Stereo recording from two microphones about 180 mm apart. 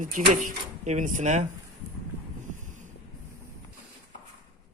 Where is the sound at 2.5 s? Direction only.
45° right (ahead or behind).